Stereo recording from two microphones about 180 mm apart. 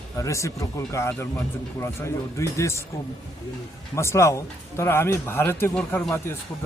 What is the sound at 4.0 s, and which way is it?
Speech, 15° left (ahead or behind).